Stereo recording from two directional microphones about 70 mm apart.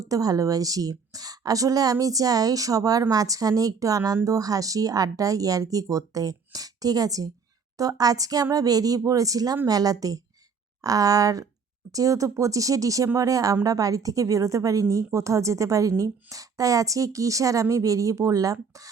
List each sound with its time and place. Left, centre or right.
0.0 s a woman's voice: right